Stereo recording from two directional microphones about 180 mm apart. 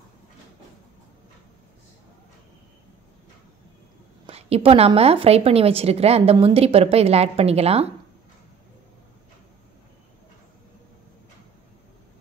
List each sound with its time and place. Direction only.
4.3 s a woman's voice: 35° right (ahead or behind)